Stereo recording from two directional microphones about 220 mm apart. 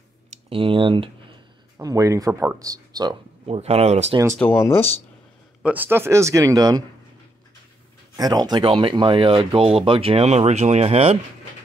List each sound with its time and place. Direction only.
0.5 s speech: 25° right (ahead or behind)
4.4 s speech: 10° left (ahead or behind)
5.6 s speech: 5° right (ahead or behind)
8.2 s speech: 20° right (ahead or behind)